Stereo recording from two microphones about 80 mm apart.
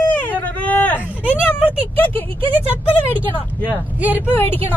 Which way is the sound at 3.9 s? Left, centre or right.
Right.